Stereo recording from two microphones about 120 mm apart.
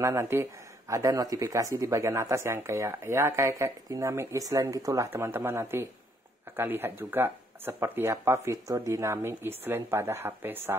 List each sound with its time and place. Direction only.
0.0 s speech: 25° right (ahead or behind)